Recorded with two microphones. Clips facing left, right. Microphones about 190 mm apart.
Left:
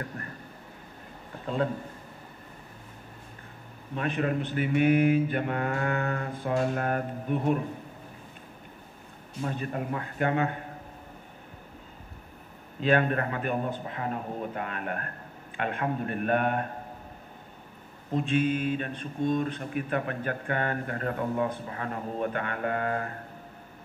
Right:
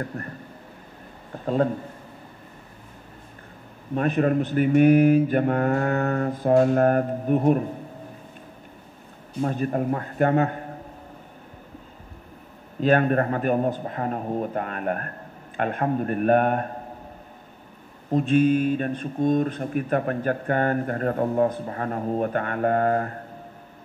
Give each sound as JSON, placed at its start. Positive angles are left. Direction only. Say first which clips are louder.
{"t": 0.2, "sound": "a sound", "louder": "right 6 dB", "side_deg": -40}
{"t": 1.4, "sound": "a man's voice", "louder": "right 6 dB", "side_deg": -45}
{"t": 3.9, "sound": "speech", "louder": "right 7 dB", "side_deg": -45}
{"t": 9.4, "sound": "speech", "louder": "right 8 dB", "side_deg": -45}
{"t": 12.8, "sound": "speech", "louder": "right 5 dB", "side_deg": -45}
{"t": 18.1, "sound": "speech", "louder": "right 7 dB", "side_deg": -45}